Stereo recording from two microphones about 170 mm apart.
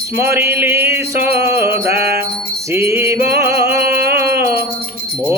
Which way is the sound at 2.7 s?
15° right (ahead or behind).